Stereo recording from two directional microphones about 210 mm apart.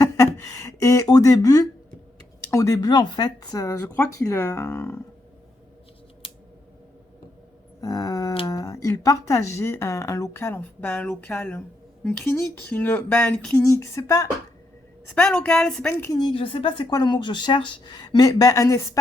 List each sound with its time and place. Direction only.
0.0 s speech: 15° left (ahead or behind)
6.2 s a sound: 25° left (ahead or behind)
7.8 s speech: 15° left (ahead or behind)
15.1 s a woman's voice: 5° left (ahead or behind)